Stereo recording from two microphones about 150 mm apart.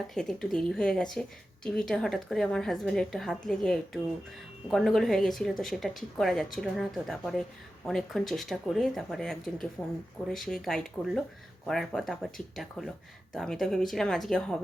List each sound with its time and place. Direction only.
0.1 s speech: 5° left (ahead or behind)